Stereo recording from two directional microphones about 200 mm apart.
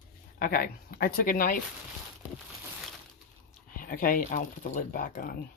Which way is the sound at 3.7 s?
45° left (ahead or behind).